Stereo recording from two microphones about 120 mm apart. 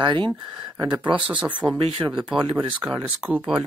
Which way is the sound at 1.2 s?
10° right (ahead or behind).